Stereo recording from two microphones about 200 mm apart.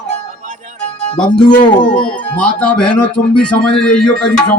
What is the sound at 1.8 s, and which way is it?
Speech, 5° left (ahead or behind).